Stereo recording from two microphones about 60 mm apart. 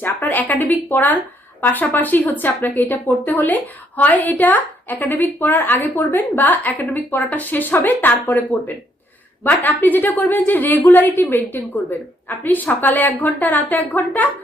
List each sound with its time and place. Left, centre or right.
0.0 s a woman's voice: left